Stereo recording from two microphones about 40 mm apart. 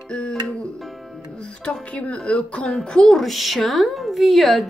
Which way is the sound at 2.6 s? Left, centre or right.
Centre.